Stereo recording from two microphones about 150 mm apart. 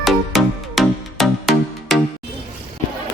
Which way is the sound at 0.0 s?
Centre (ahead or behind).